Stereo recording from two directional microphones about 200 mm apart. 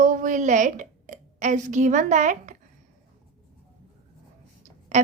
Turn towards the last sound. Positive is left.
turn(degrees=-35)  # may be behind; listen again after turning